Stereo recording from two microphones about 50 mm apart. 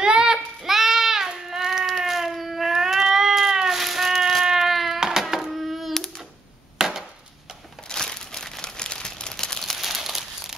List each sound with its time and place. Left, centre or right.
0.0 s child singing: centre
0.6 s a sound: centre
7.9 s crumpling: centre
9.8 s crumpling: centre